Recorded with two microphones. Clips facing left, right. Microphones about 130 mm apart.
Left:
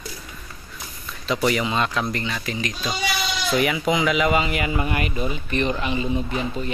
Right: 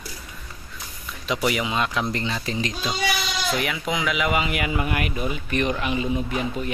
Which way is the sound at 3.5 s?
Centre (ahead or behind).